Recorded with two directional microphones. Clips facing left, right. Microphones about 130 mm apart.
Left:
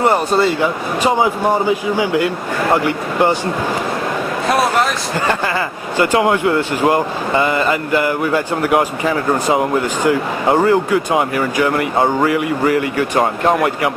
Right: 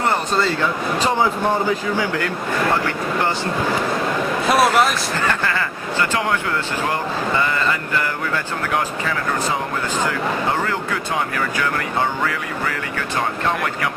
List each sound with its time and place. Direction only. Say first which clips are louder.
0.0 s speech: left 6 dB; 15° left (ahead or behind)
5.3 s speech: left 4 dB; 20° left (ahead or behind)
10.7 s speech: left 10 dB; 20° left (ahead or behind)
11.9 s speech: left 7 dB; 40° left (ahead or behind)